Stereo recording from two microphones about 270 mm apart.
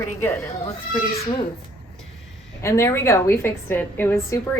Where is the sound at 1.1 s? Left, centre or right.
Left.